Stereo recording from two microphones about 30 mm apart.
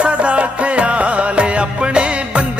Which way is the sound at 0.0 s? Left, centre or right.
Right.